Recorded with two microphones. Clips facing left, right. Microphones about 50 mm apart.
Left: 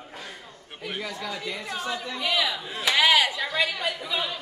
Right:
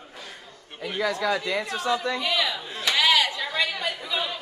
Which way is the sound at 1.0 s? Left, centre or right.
Right.